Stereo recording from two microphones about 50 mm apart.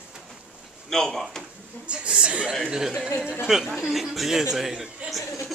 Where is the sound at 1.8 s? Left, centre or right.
Right.